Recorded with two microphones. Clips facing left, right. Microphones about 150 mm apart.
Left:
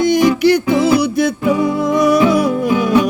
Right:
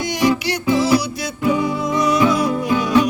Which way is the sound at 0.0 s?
50° left (ahead or behind).